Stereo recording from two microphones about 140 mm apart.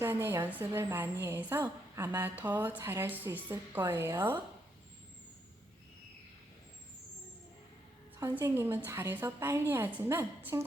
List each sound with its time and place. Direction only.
0.0 s a woman's voice: 20° right (ahead or behind)
8.2 s a woman's voice: 15° right (ahead or behind)